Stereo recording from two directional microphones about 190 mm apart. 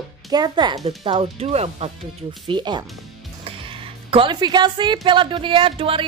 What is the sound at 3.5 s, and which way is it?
Music, 30° right (ahead or behind).